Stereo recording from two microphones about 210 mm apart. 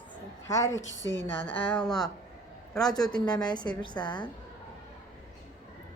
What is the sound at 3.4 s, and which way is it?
Speech, 20° left (ahead or behind).